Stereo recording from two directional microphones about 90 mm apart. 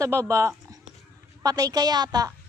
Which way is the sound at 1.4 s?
45° right (ahead or behind).